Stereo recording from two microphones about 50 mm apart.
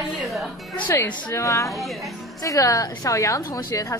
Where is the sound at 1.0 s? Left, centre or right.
Left.